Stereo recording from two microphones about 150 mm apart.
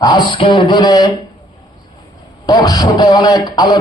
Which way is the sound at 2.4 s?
25° left (ahead or behind).